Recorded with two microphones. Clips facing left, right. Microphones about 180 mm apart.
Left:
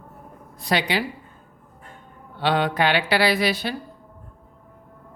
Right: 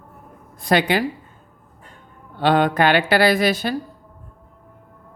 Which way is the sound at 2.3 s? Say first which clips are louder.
Right 5 dB; 45° right (ahead or behind).